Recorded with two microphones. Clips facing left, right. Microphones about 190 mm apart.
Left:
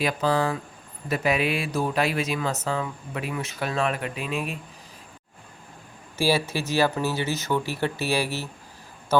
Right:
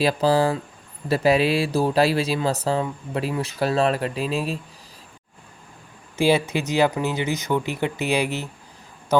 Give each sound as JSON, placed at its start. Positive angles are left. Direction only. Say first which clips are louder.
{"t": 0.0, "sound": "speech", "louder": "right 5 dB", "side_deg": -35}
{"t": 6.1, "sound": "speech", "louder": "right 4 dB", "side_deg": -20}